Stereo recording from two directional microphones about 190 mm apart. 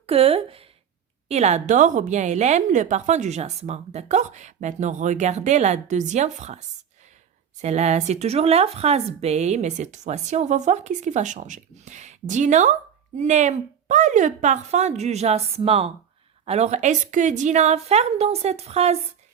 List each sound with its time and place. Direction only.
0.0 s a sound: 30° right (ahead or behind)
1.3 s a woman's voice: 35° right (ahead or behind)
7.6 s a woman's voice: 35° right (ahead or behind)